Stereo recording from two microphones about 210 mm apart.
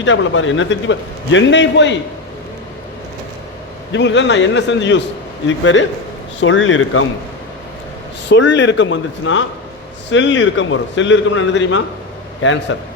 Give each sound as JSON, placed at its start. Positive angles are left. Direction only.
{"t": 0.0, "sound": "a man's voice", "side_deg": 65}
{"t": 3.9, "sound": "a man's voice", "side_deg": 60}
{"t": 8.3, "sound": "a man's voice", "side_deg": 60}